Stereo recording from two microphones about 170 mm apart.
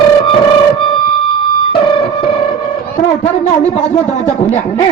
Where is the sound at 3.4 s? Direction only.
45° left (ahead or behind).